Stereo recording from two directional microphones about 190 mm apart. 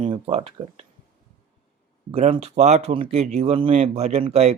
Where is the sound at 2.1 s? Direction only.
30° right (ahead or behind).